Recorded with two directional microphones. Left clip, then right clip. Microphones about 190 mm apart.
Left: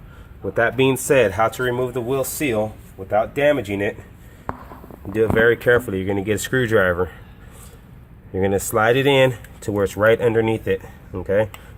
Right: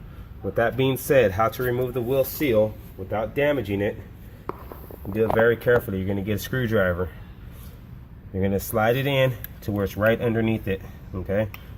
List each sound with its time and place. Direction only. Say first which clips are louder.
0.5 s speech: left 5 dB; 30° left (ahead or behind)
5.1 s speech: left 4 dB; 45° left (ahead or behind)
8.4 s speech: left 5 dB; 45° left (ahead or behind)